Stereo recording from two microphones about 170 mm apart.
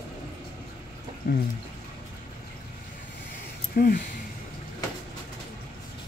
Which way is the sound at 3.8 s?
60° left (ahead or behind).